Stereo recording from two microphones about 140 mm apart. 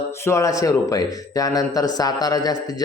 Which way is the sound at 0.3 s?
20° left (ahead or behind).